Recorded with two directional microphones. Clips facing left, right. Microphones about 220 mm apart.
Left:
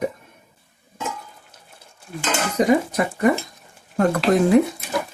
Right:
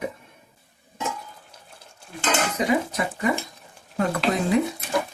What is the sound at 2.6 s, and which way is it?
Speech, 45° left (ahead or behind).